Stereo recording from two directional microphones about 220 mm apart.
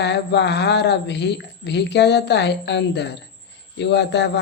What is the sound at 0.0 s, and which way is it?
A man's voice, 50° left (ahead or behind).